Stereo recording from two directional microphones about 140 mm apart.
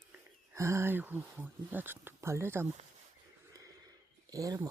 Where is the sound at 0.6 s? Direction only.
20° right (ahead or behind).